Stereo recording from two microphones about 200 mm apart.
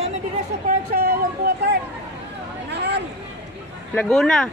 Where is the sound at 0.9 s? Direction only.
50° right (ahead or behind).